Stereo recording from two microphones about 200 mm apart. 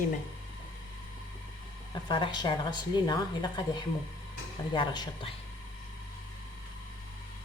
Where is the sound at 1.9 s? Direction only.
20° left (ahead or behind).